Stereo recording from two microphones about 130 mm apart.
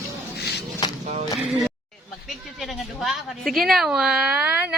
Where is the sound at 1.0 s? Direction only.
60° right (ahead or behind).